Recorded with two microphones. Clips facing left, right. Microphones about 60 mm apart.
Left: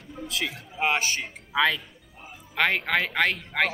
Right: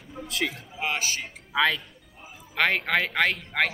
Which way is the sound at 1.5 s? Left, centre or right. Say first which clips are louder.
Even; centre.